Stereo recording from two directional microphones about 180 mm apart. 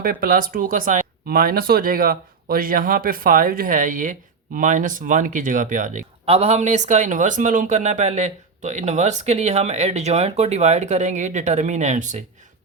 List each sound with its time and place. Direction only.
0.0 s speech: 50° right (ahead or behind)